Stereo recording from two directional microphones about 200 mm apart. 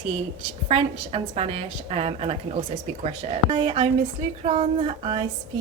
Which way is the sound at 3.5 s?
30° right (ahead or behind).